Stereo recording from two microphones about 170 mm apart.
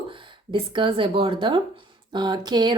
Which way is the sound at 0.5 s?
30° right (ahead or behind).